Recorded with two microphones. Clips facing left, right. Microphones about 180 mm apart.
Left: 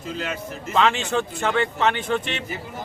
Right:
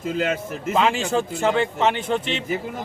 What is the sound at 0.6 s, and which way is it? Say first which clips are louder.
Speech: even; 10° right (ahead or behind).